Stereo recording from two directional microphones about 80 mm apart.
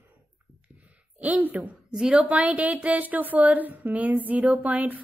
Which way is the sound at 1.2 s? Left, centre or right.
Right.